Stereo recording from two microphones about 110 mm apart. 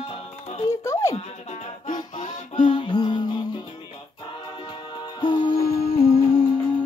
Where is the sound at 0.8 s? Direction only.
25° left (ahead or behind).